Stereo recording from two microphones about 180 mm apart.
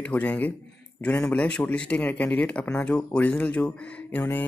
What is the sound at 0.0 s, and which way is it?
Speech, 10° left (ahead or behind).